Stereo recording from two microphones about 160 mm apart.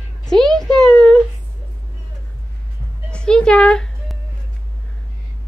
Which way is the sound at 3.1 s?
5° left (ahead or behind).